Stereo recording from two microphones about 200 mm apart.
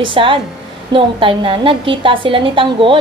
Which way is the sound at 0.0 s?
25° right (ahead or behind).